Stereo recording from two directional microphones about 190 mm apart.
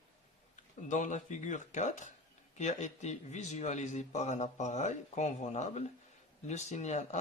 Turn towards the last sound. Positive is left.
turn(degrees=40)  # may be behind; listen again after turning